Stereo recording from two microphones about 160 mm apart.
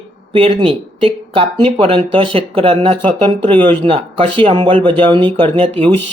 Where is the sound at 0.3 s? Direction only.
35° right (ahead or behind).